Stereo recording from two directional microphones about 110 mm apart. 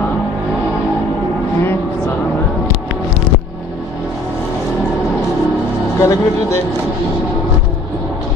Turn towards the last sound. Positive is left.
turn(degrees=25)  # may be behind; listen again after turning